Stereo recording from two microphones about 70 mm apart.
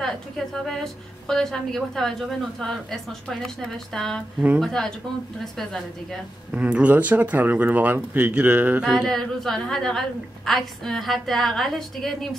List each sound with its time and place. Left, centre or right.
0.0 s a woman's voice: centre
6.5 s speech: centre
8.9 s a woman's voice: centre